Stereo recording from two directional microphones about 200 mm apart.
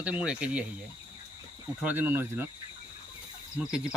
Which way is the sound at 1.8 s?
10° right (ahead or behind).